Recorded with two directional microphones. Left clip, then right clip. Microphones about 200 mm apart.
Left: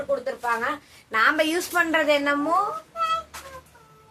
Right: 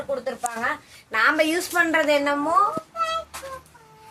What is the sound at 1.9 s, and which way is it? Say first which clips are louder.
Speech: even; 15° right (ahead or behind).